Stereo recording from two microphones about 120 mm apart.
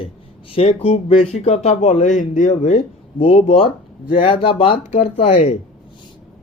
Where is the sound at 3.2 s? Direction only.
55° left (ahead or behind).